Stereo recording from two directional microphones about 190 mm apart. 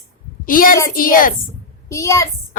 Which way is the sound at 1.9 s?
15° left (ahead or behind).